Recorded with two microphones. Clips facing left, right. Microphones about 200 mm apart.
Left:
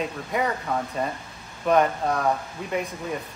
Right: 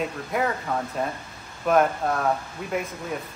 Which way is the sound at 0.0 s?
Centre (ahead or behind).